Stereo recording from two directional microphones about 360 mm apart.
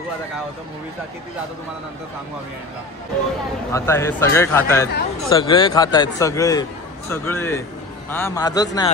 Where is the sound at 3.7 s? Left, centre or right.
Centre.